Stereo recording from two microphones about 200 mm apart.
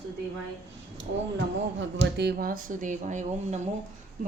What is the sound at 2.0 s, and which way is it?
Speech, 55° right (ahead or behind).